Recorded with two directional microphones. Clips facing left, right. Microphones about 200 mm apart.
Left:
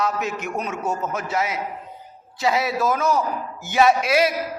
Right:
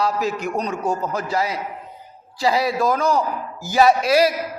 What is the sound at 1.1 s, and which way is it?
A man's voice, centre (ahead or behind).